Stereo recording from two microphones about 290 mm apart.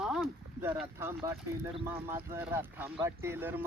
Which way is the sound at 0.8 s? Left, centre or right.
Centre.